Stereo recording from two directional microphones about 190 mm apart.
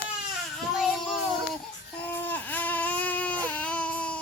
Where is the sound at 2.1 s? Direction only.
10° left (ahead or behind).